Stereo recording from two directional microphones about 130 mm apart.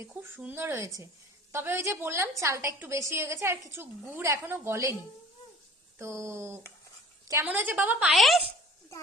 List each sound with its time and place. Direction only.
0.1 s a woman's voice: 15° right (ahead or behind)
6.0 s a woman's voice: 20° right (ahead or behind)
8.1 s speech: centre (ahead or behind)